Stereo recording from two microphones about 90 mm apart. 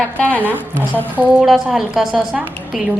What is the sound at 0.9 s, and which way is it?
A woman's voice, 20° right (ahead or behind).